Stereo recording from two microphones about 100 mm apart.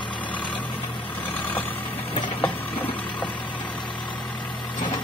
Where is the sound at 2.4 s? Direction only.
20° left (ahead or behind).